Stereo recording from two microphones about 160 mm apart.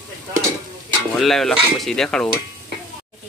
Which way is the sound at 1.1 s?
Centre (ahead or behind).